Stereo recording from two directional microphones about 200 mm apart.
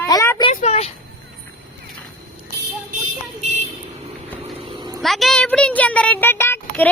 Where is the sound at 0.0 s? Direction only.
15° left (ahead or behind).